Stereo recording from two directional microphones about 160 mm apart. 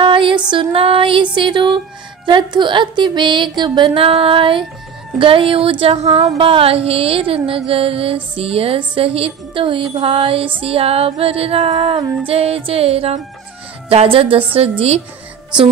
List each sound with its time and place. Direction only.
0.0 s music: 30° right (ahead or behind)
0.5 s speech: 35° right (ahead or behind)